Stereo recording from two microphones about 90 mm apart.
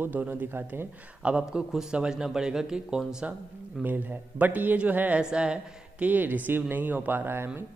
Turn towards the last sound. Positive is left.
turn(degrees=-25)  # may be behind; listen again after turning